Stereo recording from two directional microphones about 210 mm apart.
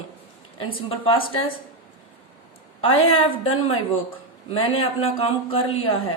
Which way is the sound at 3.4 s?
85° left.